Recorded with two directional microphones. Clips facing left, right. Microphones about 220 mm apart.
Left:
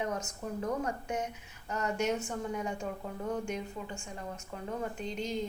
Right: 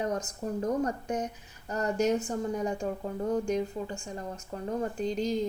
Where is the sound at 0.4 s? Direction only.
35° right (ahead or behind).